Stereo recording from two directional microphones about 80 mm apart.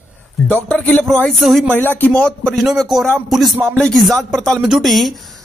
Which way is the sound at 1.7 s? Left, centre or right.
Left.